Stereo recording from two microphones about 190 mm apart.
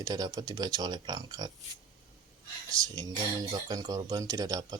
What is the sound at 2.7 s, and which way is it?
Speech, 20° right (ahead or behind).